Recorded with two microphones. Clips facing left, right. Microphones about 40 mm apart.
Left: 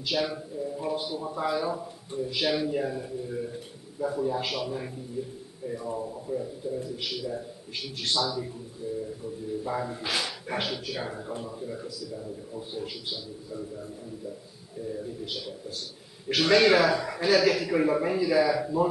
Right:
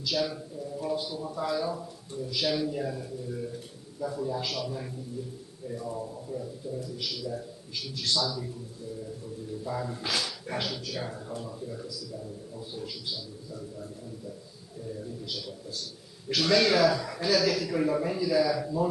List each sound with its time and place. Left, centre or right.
0.0 s a man's voice: left
9.6 s a man's voice: left
15.2 s a man's voice: left